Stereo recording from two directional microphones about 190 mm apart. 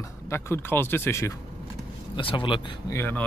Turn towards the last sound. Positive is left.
turn(degrees=10)  # may be behind; listen again after turning